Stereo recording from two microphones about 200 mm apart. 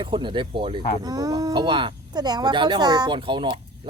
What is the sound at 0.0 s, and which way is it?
Speech, 25° right (ahead or behind).